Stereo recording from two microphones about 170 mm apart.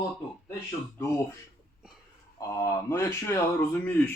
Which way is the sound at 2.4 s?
20° left (ahead or behind).